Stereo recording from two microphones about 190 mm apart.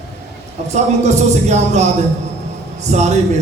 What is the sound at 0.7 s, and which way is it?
A man's voice, 35° right (ahead or behind).